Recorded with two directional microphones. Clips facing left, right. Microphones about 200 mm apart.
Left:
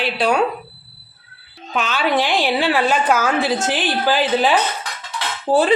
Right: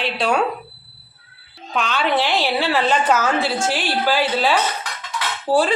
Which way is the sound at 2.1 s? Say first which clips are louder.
Left 2 dB; 15° left (ahead or behind).